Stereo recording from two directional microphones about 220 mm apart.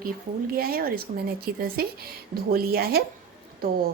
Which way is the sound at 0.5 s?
45° right (ahead or behind).